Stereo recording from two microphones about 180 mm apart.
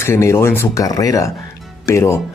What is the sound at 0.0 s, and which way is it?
Speech, 15° left (ahead or behind).